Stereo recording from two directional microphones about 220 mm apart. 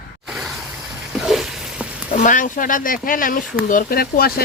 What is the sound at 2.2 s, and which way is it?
Speech, 35° left (ahead or behind).